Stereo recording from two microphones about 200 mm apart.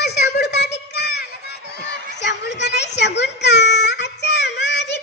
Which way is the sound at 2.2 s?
60° left (ahead or behind).